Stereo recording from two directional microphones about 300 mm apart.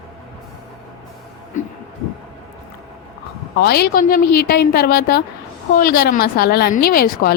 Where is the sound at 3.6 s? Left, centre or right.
Left.